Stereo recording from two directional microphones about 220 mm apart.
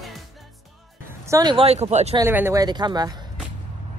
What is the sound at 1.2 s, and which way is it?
Speech, 15° right (ahead or behind).